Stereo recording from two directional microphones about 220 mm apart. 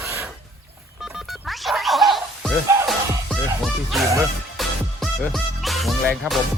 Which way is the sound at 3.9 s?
Centre (ahead or behind).